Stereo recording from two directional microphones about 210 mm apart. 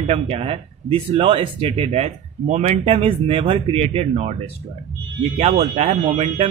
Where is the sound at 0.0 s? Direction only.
30° right (ahead or behind).